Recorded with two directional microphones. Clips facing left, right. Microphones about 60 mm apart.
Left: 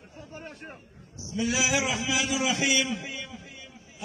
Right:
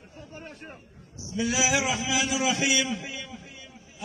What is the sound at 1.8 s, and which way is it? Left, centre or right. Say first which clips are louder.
Speech: right 1 dB; centre.